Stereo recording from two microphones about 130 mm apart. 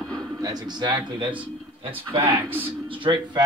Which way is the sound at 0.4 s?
30° right (ahead or behind).